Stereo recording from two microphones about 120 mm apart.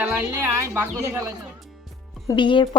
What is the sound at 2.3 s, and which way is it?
Speech, 40° left (ahead or behind).